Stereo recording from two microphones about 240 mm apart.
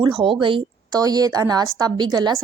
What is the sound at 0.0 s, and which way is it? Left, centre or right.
A woman's voice, right.